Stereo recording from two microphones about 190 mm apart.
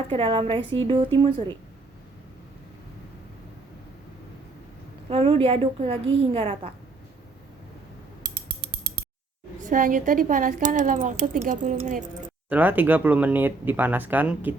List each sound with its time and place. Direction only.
0.1 s a woman's voice: 30° right (ahead or behind)
5.0 s a woman's voice: 30° right (ahead or behind)
9.6 s a woman's voice: 45° right (ahead or behind)
12.5 s speech: 10° right (ahead or behind)